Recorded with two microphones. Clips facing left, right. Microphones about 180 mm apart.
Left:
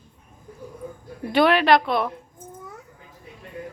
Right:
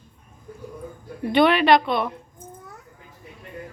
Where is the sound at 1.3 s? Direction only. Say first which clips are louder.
Right 1 dB; centre (ahead or behind).